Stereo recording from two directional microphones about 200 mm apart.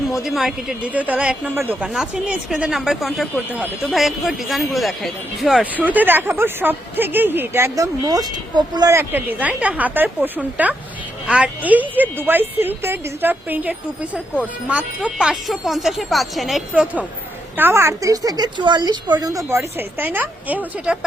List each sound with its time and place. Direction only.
0.2 s a woman's voice: centre (ahead or behind)